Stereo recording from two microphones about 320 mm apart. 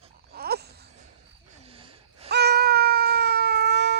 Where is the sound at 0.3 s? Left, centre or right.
Right.